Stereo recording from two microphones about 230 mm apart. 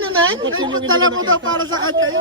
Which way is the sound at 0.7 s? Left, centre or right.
Right.